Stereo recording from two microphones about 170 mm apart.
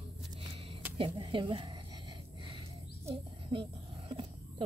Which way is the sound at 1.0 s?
30° right (ahead or behind).